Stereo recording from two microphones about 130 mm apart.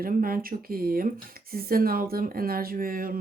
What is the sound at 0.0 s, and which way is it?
Speech, 90° right.